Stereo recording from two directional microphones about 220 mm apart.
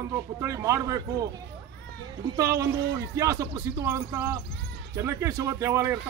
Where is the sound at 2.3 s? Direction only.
15° right (ahead or behind).